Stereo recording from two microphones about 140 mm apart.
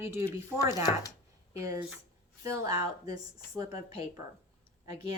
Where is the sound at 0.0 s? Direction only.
20° right (ahead or behind).